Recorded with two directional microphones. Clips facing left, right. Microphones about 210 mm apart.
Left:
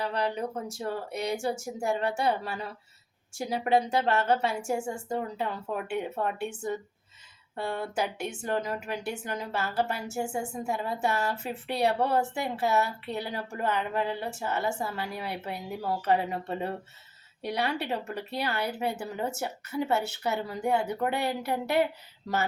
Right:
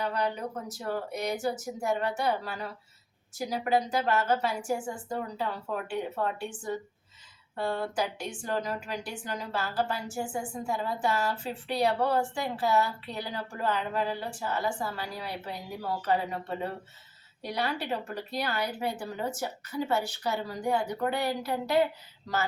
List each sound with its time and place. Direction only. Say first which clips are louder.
0.0 s speech: left 1 dB; 30° left (ahead or behind)
17.4 s speech: left 2 dB; 25° left (ahead or behind)